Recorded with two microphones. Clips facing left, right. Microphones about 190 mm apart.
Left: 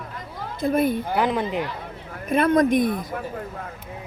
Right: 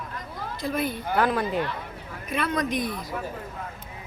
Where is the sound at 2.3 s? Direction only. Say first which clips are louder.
Left 9 dB; 50° left (ahead or behind).